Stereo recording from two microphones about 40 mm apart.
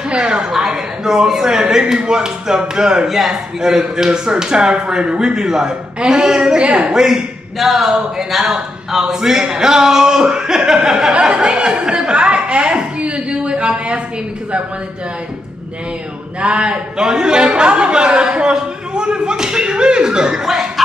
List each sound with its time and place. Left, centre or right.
0.1 s a woman's voice: centre
3.1 s a woman's voice: centre; by 6.9 s right
6.9 s a woman's voice: centre
7.5 s speech: centre; by 14.0 s right
16.3 s a man's voice: right
20.4 s chuckle: centre